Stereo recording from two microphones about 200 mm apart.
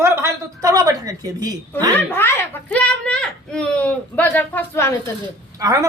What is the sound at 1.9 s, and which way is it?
Speech, 10° left (ahead or behind).